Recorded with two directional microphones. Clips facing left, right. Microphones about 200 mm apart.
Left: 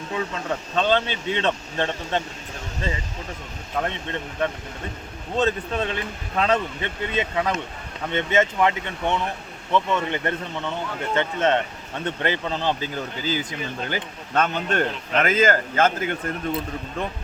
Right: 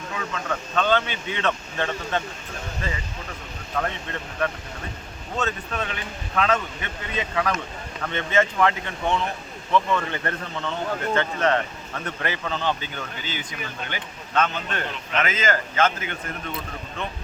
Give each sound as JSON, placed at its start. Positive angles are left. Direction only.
{"t": 0.1, "sound": "speech", "side_deg": 30}
{"t": 3.8, "sound": "speech", "side_deg": 20}